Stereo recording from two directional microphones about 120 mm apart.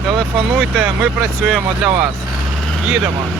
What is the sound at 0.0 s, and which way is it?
Speech, centre (ahead or behind).